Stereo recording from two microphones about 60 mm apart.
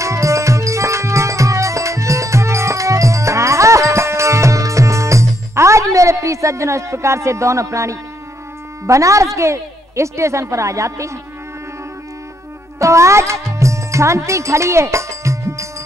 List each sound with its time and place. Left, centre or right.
0.0 s music: right
8.8 s a woman's voice: right
12.7 s music: right